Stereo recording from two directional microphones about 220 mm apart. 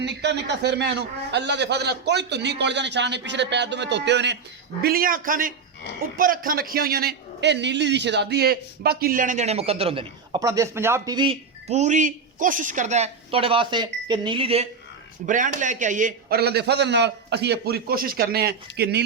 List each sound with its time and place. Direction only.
0.0 s a man's voice: 50° right (ahead or behind)